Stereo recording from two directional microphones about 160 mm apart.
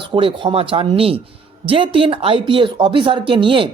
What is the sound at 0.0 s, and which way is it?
Speech, 35° right (ahead or behind).